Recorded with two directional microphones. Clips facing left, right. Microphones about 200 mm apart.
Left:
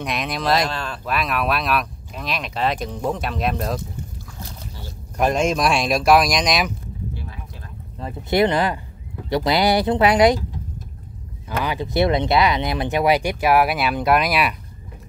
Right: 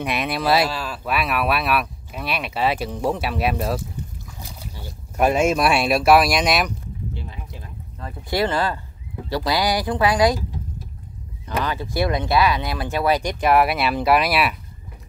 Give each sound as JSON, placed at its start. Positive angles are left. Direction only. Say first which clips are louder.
{"t": 0.0, "sound": "speech", "louder": "right 1 dB", "side_deg": -5}
{"t": 7.2, "sound": "a sound", "louder": "right 1 dB", "side_deg": -20}
{"t": 8.0, "sound": "speech", "louder": "left 4 dB", "side_deg": 20}
{"t": 11.6, "sound": "speech", "louder": "left 4 dB", "side_deg": 15}